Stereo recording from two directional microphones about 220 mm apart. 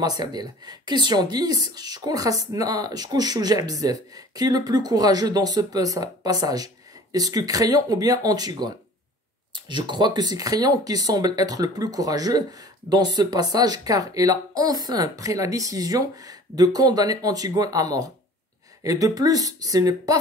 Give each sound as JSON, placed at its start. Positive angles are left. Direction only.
{"t": 0.0, "sound": "a woman's voice", "side_deg": -20}